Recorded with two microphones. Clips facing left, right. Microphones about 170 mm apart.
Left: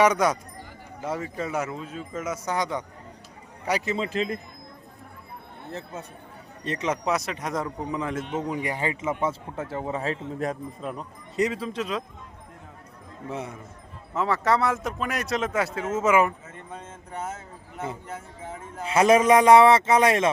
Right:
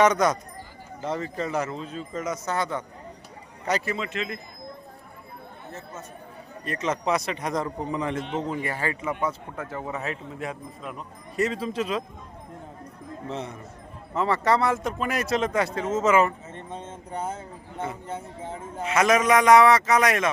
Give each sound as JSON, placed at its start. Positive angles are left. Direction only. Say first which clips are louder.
{"t": 0.0, "sound": "speech", "louder": "even", "side_deg": 10}
{"t": 3.9, "sound": "a man's voice", "louder": "left 4 dB", "side_deg": 35}
{"t": 6.7, "sound": "speech", "louder": "even", "side_deg": 15}
{"t": 7.0, "sound": "speech", "louder": "right 1 dB", "side_deg": 0}
{"t": 8.4, "sound": "a man's voice", "louder": "left 1 dB", "side_deg": 15}
{"t": 11.5, "sound": "speech", "louder": "right 2 dB", "side_deg": 0}
{"t": 13.2, "sound": "speech", "louder": "left 1 dB", "side_deg": 10}
{"t": 16.5, "sound": "speech", "louder": "right 3 dB", "side_deg": -30}
{"t": 18.9, "sound": "a man's voice", "louder": "left 3 dB", "side_deg": 30}